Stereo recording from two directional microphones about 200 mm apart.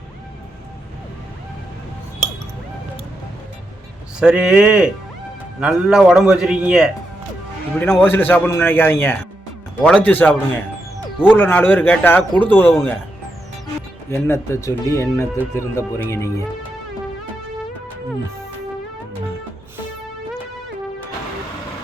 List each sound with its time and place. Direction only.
4.2 s a man's voice: 5° right (ahead or behind)
8.0 s speech: 10° left (ahead or behind)
14.1 s speech: 10° left (ahead or behind)